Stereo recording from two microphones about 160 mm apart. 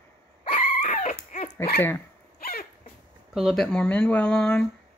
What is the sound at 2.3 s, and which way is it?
Dog, 75° left (ahead or behind).